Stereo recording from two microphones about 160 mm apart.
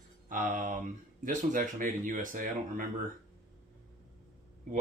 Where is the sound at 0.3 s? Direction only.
55° right (ahead or behind).